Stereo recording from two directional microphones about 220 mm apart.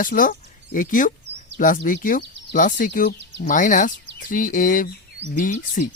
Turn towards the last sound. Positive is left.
turn(degrees=35)  # may be behind; listen again after turning